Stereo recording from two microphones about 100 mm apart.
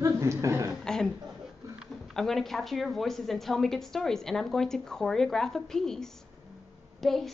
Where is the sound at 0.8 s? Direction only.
5° left (ahead or behind).